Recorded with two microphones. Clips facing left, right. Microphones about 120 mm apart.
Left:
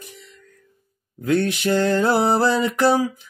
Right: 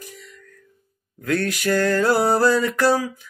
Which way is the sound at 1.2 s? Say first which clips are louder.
Left 2 dB; 20° left (ahead or behind).